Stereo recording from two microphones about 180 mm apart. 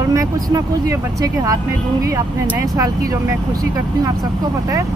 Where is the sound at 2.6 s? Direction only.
20° right (ahead or behind).